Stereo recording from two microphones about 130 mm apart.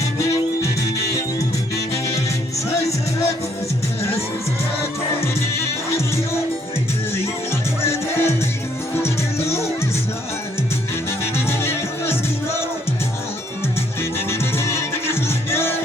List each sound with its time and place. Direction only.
7.9 s music: 20° left (ahead or behind)
11.3 s music: 20° left (ahead or behind)
14.0 s music: 20° left (ahead or behind)